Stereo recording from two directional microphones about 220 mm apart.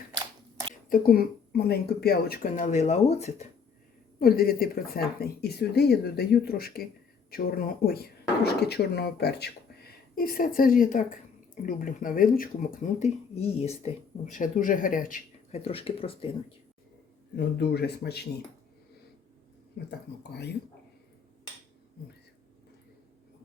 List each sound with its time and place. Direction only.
0.7 s speech: 40° left (ahead or behind)
4.2 s speech: 45° left (ahead or behind); by 16.3 s 25° left (ahead or behind)
17.3 s speech: 50° left (ahead or behind)
19.9 s speech: 50° left (ahead or behind)